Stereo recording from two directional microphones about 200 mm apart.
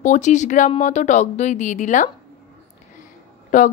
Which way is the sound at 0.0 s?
35° left (ahead or behind).